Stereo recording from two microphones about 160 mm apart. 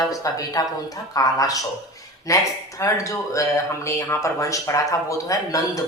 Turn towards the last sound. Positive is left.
turn(degrees=20)  # may be behind; listen again after turning